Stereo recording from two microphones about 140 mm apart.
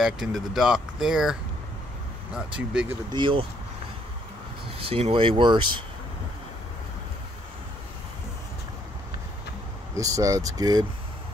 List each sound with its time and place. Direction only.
0.0 s speech: 5° right (ahead or behind)
3.1 s speech: 35° right (ahead or behind)
4.6 s speech: 45° right (ahead or behind)
9.9 s speech: 25° right (ahead or behind)